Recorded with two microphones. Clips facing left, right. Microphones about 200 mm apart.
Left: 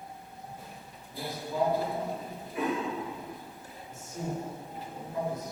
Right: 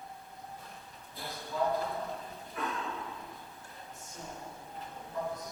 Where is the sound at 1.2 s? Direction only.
15° left (ahead or behind).